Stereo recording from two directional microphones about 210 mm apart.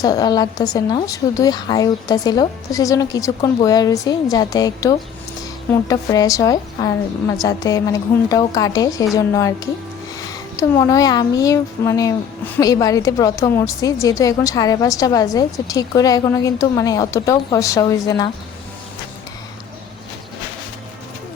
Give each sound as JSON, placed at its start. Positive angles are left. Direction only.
{"t": 0.0, "sound": "a woman's voice", "side_deg": 15}
{"t": 10.6, "sound": "a woman's voice", "side_deg": 15}